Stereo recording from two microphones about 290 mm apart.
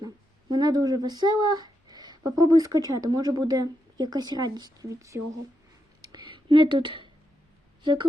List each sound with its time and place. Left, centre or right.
0.5 s speech: centre
6.0 s whispering: centre